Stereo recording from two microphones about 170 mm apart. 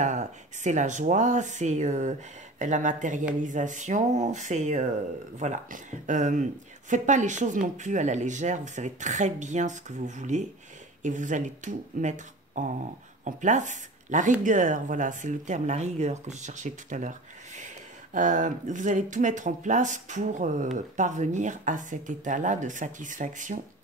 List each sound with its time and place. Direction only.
0.0 s speech: 45° right (ahead or behind)
18.1 s speech: 50° right (ahead or behind)